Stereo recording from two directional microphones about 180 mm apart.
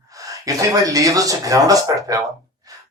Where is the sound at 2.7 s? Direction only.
20° right (ahead or behind).